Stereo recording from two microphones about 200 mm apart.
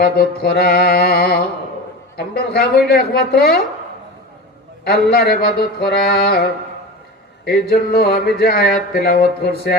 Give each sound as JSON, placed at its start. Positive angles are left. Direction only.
{"t": 0.0, "sound": "speech", "side_deg": 50}
{"t": 4.9, "sound": "speech", "side_deg": 50}